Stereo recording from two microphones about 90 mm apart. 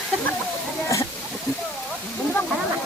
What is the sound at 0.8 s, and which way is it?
Speech, 40° left (ahead or behind).